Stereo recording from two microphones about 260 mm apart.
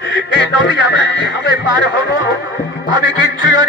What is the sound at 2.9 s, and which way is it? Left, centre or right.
Music, centre.